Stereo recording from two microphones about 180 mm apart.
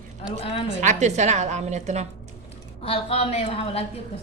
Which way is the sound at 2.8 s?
30° left (ahead or behind).